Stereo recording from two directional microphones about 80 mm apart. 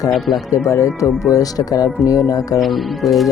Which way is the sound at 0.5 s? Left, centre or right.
Left.